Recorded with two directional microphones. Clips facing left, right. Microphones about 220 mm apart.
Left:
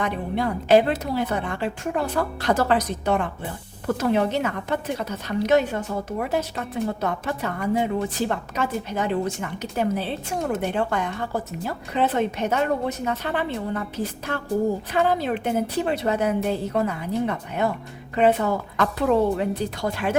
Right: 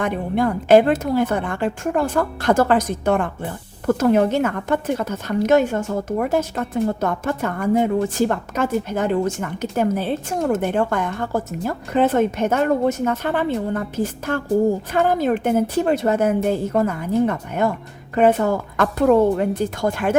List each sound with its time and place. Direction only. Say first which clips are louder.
0.0 s a woman's voice: right 5 dB; 50° right (ahead or behind)